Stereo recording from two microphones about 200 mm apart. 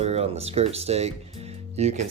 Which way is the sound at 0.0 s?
30° right (ahead or behind).